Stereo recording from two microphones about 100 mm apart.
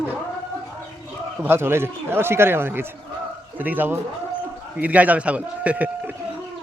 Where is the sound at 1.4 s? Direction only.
25° right (ahead or behind).